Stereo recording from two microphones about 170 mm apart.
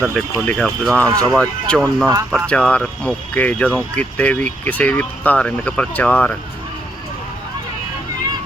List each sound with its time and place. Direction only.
0.1 s speech: 5° left (ahead or behind)
1.0 s speech: 25° right (ahead or behind)
1.3 s speech: 5° left (ahead or behind)